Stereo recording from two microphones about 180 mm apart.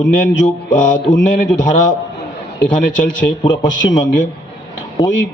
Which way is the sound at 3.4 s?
25° left (ahead or behind).